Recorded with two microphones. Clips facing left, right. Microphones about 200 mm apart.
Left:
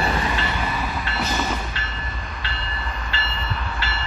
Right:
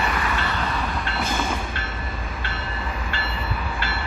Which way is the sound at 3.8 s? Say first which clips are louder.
Right 1 dB; 55° right (ahead or behind).